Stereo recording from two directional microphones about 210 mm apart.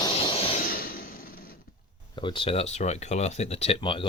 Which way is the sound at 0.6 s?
45° left (ahead or behind).